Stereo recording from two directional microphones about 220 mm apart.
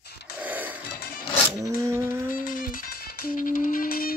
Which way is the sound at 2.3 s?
40° left (ahead or behind).